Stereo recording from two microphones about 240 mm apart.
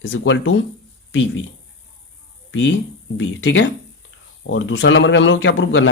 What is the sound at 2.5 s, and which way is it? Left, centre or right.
Speech, left.